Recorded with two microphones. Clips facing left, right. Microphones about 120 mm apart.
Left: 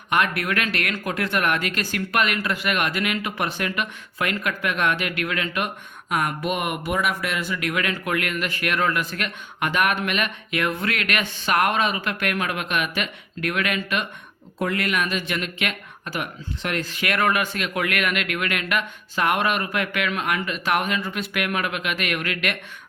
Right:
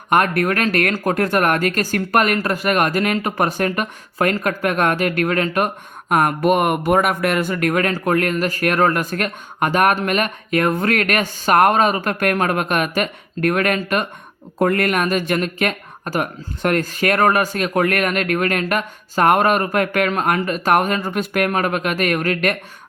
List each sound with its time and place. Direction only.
0.1 s speech: 45° right (ahead or behind)